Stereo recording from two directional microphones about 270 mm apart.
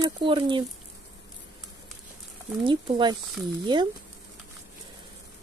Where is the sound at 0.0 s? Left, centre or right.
Centre.